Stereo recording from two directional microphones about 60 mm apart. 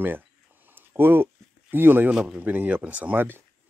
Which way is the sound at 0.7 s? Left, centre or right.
Right.